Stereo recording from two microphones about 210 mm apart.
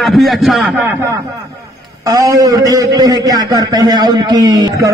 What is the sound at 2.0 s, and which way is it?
A man's voice, 15° right (ahead or behind).